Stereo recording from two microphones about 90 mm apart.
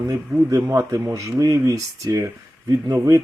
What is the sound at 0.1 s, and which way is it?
Speech, 35° right (ahead or behind).